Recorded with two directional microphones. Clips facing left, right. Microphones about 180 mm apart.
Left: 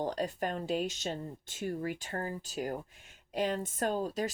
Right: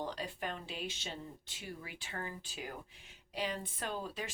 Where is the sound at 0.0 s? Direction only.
45° left (ahead or behind).